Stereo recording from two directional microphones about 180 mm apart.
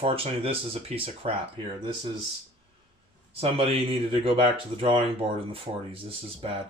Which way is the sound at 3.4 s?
30° right (ahead or behind).